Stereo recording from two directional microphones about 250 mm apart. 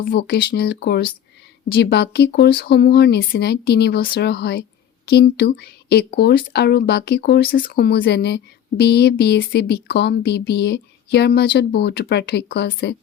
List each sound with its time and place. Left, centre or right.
0.0 s speech: left